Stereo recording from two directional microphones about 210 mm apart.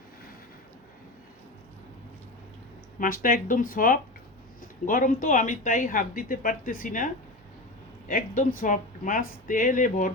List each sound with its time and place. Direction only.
3.0 s speech: 40° left (ahead or behind)